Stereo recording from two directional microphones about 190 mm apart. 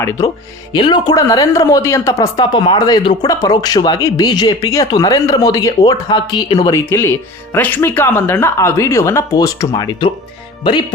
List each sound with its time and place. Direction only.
0.0 s a woman's voice: 15° left (ahead or behind)